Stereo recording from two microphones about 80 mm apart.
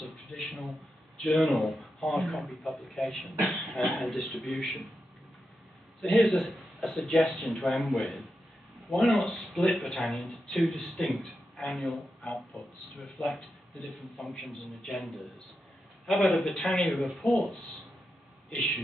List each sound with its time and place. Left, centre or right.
0.1 s a man's voice: centre
5.9 s a man's voice: centre
16.5 s speech: centre
16.8 s a man's voice: centre